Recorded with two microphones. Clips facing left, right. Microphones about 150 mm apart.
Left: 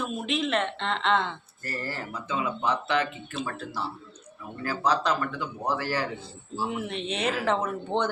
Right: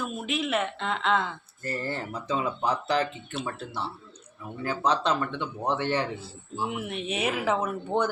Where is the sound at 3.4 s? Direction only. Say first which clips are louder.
Left 1 dB; 25° right (ahead or behind).